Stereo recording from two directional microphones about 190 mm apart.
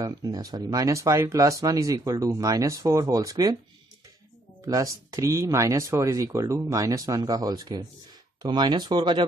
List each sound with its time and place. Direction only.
0.0 s speech: 20° right (ahead or behind)
4.6 s speech: 20° right (ahead or behind)